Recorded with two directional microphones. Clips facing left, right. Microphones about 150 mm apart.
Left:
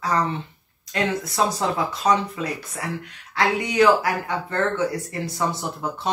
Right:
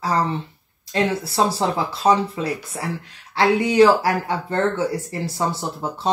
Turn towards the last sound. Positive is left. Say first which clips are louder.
# right 1 dB
turn(degrees=-25)  # may be behind; listen again after turning